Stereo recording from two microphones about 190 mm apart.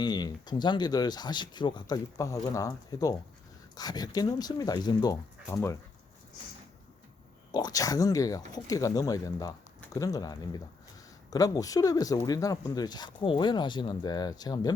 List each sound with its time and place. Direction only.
0.0 s speech: 20° left (ahead or behind)
7.5 s speech: 20° left (ahead or behind)